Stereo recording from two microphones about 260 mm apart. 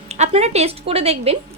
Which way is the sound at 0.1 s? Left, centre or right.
Right.